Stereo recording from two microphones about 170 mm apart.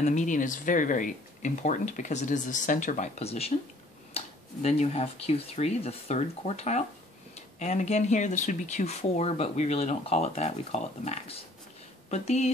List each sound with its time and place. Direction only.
0.0 s speech: 45° left (ahead or behind)